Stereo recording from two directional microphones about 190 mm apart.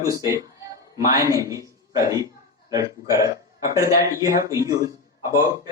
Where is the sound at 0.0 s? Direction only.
15° right (ahead or behind).